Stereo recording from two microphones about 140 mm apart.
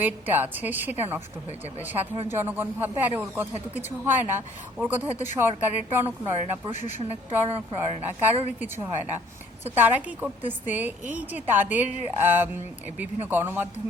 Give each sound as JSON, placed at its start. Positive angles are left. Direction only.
{"t": 0.0, "sound": "a woman's voice", "side_deg": -15}
{"t": 6.7, "sound": "a woman's voice", "side_deg": 60}
{"t": 7.8, "sound": "a woman's voice", "side_deg": -15}